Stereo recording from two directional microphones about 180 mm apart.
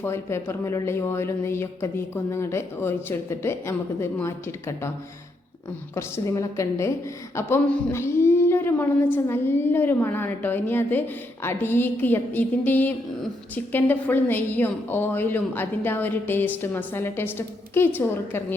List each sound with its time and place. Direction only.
0.0 s a woman's voice: 15° left (ahead or behind)
5.9 s a woman's voice: 15° left (ahead or behind)